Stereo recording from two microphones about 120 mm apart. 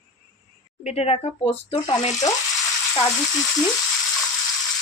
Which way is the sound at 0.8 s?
60° left (ahead or behind).